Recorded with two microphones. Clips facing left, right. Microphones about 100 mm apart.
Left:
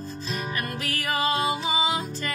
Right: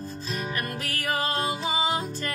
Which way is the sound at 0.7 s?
45° right (ahead or behind).